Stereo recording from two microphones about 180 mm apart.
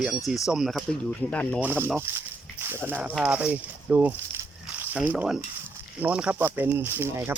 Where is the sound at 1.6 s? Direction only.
10° right (ahead or behind).